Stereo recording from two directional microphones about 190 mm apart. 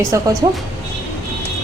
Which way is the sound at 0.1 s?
15° right (ahead or behind).